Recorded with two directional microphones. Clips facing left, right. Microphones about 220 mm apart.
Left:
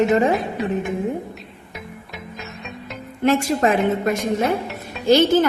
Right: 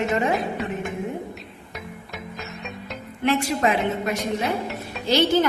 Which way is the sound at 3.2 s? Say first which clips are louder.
Left 4 dB; 45° left (ahead or behind).